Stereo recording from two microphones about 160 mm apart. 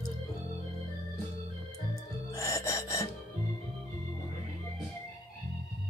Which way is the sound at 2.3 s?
20° left (ahead or behind).